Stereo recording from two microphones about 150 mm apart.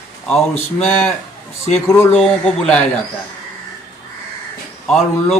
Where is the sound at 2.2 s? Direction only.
Centre (ahead or behind).